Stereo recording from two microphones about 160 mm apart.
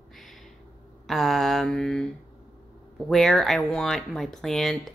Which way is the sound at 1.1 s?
Centre (ahead or behind).